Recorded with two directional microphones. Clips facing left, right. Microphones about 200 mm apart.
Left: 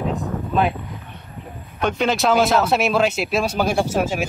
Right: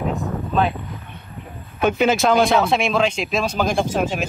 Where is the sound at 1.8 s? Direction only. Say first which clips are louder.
Right 3 dB; 5° right (ahead or behind).